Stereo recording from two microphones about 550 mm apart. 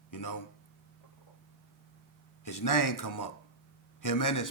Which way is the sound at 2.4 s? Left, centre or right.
Left.